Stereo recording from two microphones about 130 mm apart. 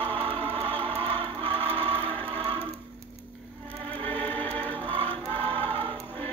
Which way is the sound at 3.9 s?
10° left (ahead or behind).